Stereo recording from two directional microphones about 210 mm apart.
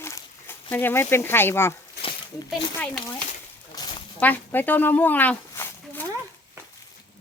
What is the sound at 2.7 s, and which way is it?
Speech, 10° left (ahead or behind).